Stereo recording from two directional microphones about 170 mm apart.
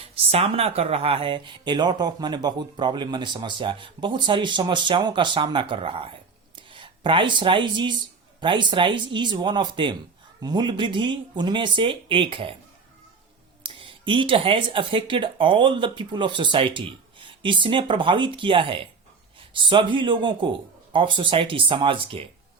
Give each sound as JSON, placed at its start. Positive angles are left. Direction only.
{"t": 0.0, "sound": "speech", "side_deg": -35}
{"t": 13.7, "sound": "speech", "side_deg": -30}